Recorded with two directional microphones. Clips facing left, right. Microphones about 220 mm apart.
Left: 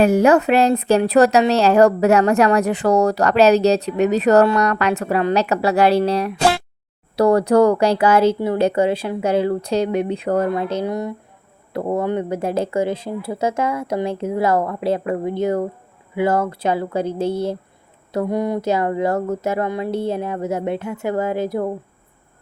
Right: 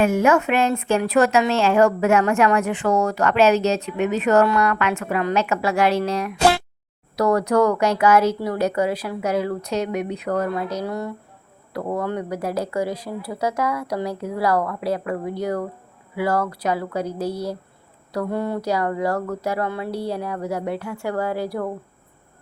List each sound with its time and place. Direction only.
0.0 s a woman's voice: 35° left (ahead or behind)